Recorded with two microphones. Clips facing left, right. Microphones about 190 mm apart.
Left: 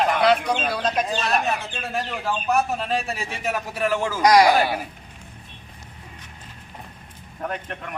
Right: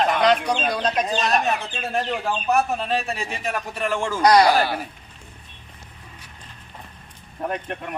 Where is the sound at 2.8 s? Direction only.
Centre (ahead or behind).